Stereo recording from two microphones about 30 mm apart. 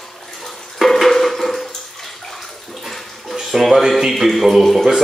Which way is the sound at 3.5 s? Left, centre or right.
Centre.